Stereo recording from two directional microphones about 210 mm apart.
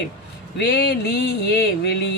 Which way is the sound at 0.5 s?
55° left (ahead or behind).